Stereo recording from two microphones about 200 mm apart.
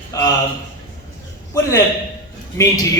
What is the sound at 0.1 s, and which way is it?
Speech, 15° left (ahead or behind).